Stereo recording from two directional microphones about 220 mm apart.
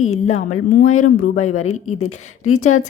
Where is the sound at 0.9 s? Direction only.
75° left (ahead or behind).